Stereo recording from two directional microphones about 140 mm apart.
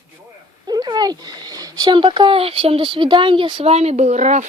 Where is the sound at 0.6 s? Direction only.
30° right (ahead or behind).